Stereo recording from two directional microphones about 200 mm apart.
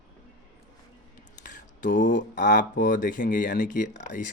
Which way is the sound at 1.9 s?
40° left (ahead or behind).